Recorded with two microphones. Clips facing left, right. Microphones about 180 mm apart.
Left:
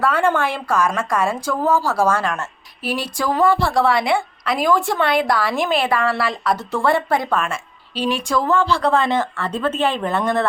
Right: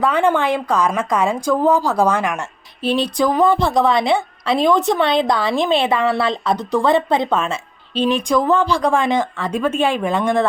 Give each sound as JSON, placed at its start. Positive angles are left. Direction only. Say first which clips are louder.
{"t": 0.0, "sound": "a woman's voice", "louder": "right 2 dB", "side_deg": -15}